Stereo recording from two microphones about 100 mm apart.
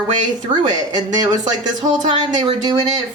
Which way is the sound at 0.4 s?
45° right (ahead or behind).